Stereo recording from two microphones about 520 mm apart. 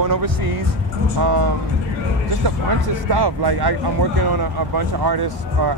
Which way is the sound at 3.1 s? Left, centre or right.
Right.